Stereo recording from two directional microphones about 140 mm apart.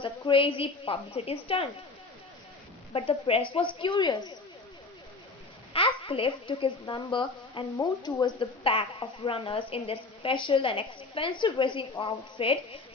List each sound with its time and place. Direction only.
0.0 s a woman's voice: 40° left (ahead or behind)
2.9 s a woman's voice: 40° left (ahead or behind)
5.7 s a woman's voice: 40° left (ahead or behind)